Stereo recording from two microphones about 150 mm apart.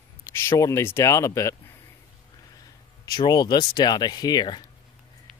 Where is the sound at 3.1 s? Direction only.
25° left (ahead or behind).